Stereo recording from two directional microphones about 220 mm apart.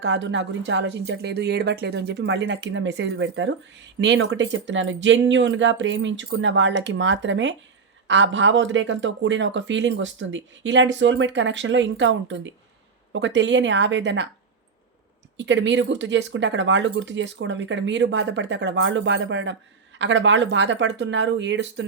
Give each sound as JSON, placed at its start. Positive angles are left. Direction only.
{"t": 0.0, "sound": "speech", "side_deg": -55}
{"t": 15.4, "sound": "speech", "side_deg": -55}